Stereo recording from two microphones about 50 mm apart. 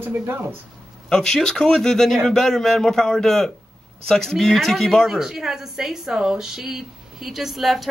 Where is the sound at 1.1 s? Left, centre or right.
Centre.